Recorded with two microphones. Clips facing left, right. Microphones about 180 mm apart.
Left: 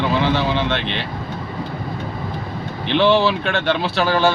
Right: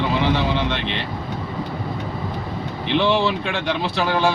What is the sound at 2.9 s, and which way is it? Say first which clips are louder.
Speech: left 3 dB; 75° left (ahead or behind).